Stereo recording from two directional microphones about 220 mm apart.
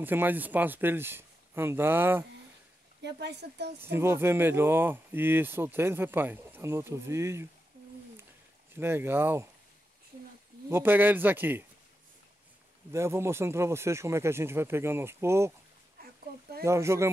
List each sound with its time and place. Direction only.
0.0 s speech: 10° right (ahead or behind)
3.0 s speech: 50° right (ahead or behind)
3.8 s speech: 10° right (ahead or behind)
8.7 s speech: 10° right (ahead or behind)
10.7 s speech: 10° right (ahead or behind)
12.9 s speech: 10° right (ahead or behind)
16.6 s speech: 10° right (ahead or behind)